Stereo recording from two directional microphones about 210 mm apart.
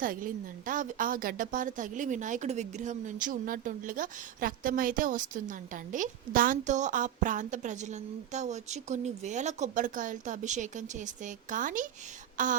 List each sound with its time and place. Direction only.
0.0 s a woman's voice: 40° right (ahead or behind)